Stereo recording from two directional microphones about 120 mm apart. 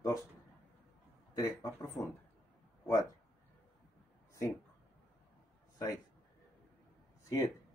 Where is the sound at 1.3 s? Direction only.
30° left (ahead or behind).